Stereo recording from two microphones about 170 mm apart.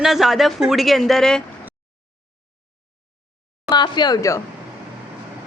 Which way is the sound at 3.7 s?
25° left (ahead or behind).